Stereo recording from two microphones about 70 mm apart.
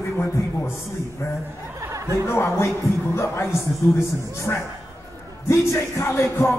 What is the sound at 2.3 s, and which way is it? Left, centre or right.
Music, left.